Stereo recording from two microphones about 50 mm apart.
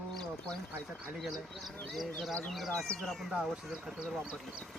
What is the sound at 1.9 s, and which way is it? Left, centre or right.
Speech, centre.